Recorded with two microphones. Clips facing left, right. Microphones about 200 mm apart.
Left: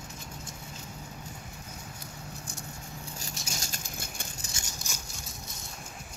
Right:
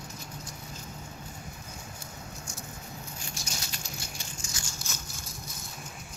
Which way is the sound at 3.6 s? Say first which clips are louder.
Even; 50° left (ahead or behind).